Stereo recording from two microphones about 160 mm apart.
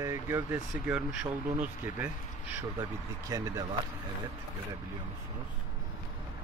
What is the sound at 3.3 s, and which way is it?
Speech, 20° right (ahead or behind).